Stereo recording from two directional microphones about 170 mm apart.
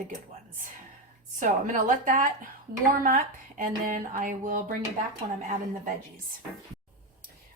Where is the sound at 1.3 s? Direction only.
50° right (ahead or behind).